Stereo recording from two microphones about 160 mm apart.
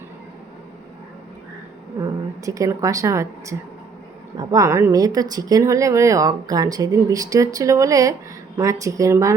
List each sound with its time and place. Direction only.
2.0 s speech: 20° right (ahead or behind)